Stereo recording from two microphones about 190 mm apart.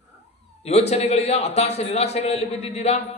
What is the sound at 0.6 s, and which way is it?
A man's voice, 35° left (ahead or behind).